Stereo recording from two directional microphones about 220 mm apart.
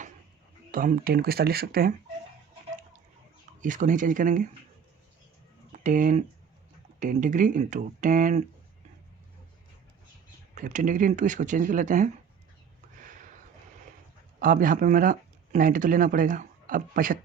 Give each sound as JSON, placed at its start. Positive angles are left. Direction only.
{"t": 0.7, "sound": "speech", "side_deg": -40}
{"t": 3.6, "sound": "speech", "side_deg": -35}
{"t": 5.8, "sound": "speech", "side_deg": -35}
{"t": 10.5, "sound": "speech", "side_deg": -35}
{"t": 14.3, "sound": "speech", "side_deg": -40}